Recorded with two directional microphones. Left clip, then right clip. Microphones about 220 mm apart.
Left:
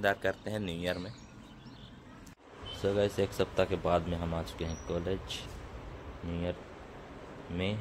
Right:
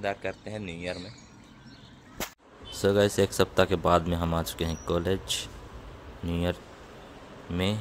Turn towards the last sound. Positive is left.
turn(degrees=-30)  # may be behind; listen again after turning